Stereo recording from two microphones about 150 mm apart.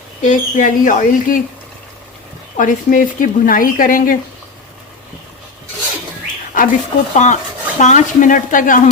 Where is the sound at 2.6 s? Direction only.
65° left (ahead or behind).